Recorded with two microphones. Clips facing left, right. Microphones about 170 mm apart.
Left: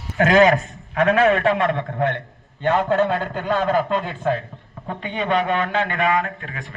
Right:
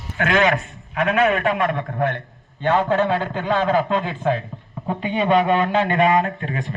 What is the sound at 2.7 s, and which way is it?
Speech, 20° right (ahead or behind).